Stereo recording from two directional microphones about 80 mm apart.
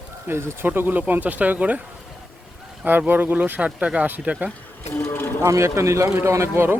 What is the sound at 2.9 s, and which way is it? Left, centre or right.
Speech, right.